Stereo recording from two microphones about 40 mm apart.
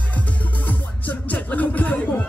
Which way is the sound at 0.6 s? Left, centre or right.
Left.